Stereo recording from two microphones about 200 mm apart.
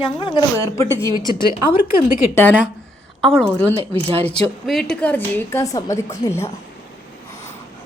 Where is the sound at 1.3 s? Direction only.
50° left (ahead or behind).